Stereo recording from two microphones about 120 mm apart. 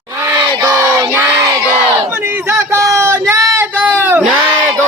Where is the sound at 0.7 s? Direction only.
20° right (ahead or behind).